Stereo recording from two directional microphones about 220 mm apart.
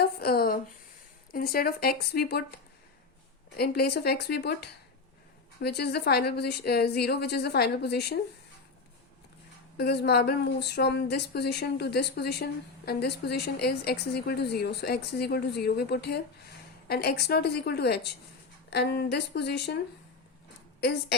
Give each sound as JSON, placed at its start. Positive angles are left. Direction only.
{"t": 0.0, "sound": "a sound", "side_deg": 45}
{"t": 1.3, "sound": "speech", "side_deg": 45}
{"t": 3.6, "sound": "speech", "side_deg": 45}
{"t": 9.7, "sound": "speech", "side_deg": 50}